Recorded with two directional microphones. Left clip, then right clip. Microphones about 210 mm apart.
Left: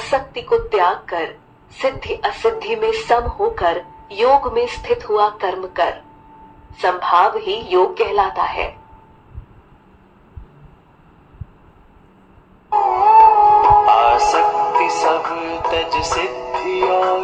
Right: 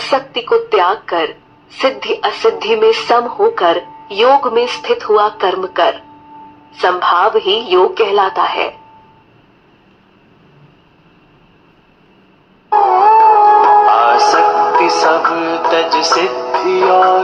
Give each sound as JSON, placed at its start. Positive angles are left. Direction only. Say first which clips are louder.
{"t": 0.0, "sound": "speech", "louder": "right 5 dB", "side_deg": -15}
{"t": 12.7, "sound": "music", "louder": "right 3 dB", "side_deg": -15}